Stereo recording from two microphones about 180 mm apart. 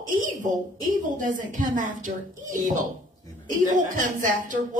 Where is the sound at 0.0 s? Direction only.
45° right (ahead or behind).